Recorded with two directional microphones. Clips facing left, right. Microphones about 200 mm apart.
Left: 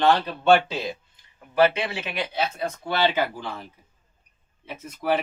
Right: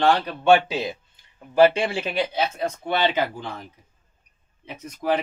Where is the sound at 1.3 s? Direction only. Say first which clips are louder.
Right 4 dB; 30° right (ahead or behind).